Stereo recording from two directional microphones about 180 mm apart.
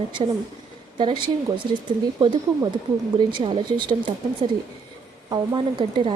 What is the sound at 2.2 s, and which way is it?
Speech, 25° right (ahead or behind).